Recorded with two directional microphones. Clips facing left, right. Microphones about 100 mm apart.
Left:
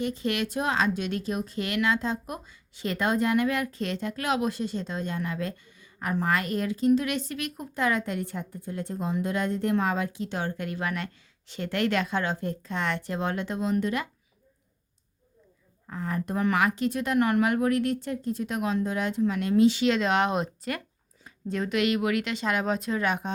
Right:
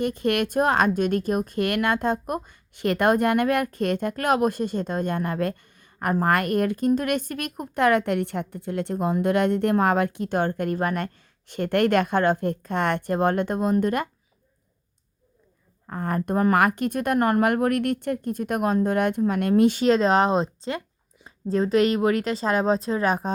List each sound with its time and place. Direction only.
0.0 s speech: 55° right (ahead or behind)
15.9 s a woman's voice: 50° right (ahead or behind)